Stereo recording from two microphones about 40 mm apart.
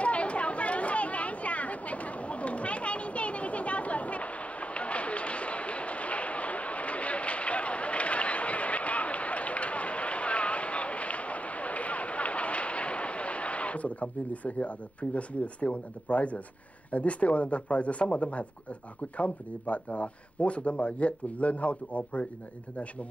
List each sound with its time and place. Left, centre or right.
0.0 s chatter: left
16.9 s speech: left